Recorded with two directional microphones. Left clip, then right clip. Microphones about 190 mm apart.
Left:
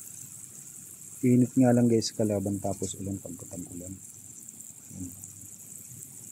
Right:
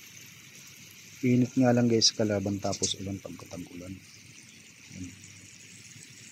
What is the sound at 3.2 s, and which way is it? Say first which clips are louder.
Speech: even; centre (ahead or behind).